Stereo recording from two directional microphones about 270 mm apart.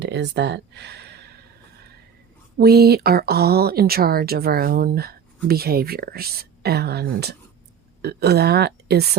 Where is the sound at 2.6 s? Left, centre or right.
Right.